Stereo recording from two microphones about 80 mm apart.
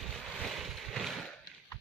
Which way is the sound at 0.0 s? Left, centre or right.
Centre.